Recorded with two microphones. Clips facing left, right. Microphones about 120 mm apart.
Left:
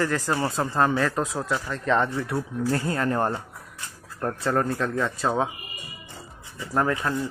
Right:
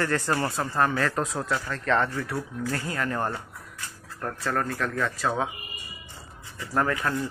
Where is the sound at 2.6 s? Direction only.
30° left (ahead or behind).